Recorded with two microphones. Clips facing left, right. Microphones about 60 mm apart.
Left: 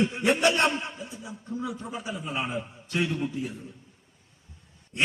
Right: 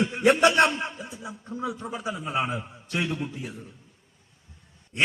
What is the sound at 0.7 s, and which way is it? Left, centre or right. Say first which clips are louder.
A man's voice: right 1 dB; right.